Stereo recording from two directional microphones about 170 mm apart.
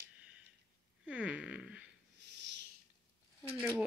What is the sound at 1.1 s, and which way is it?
Fart, 5° right (ahead or behind).